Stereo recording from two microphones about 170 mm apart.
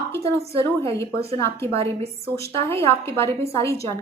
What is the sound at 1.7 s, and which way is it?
Speech, 35° right (ahead or behind).